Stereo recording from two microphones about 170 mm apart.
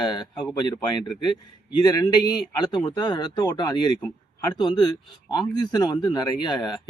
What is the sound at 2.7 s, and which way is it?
Speech, 25° left (ahead or behind).